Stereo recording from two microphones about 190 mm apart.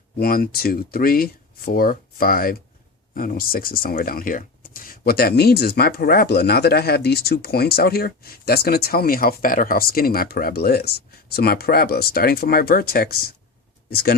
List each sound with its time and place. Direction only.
0.2 s speech: 50° left (ahead or behind)